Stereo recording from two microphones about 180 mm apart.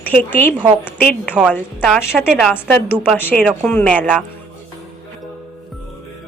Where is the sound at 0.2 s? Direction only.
10° left (ahead or behind).